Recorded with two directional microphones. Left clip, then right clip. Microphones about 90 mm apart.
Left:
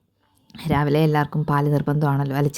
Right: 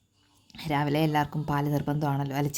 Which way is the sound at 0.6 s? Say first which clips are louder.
Left 6 dB; 30° left (ahead or behind).